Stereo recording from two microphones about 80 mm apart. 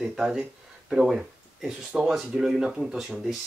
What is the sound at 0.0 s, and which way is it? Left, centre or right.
Speech, centre.